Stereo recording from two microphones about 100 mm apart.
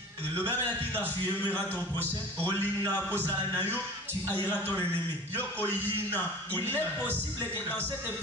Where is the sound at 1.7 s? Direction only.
20° left (ahead or behind).